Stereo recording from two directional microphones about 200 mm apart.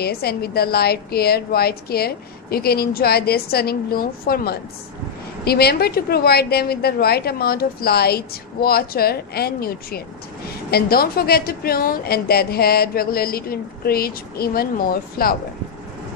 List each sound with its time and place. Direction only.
0.0 s a woman's voice: 50° left (ahead or behind)